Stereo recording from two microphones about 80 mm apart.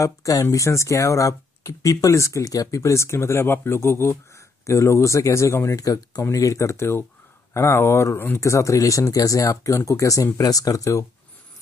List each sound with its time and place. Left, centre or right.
0.0 s speech: left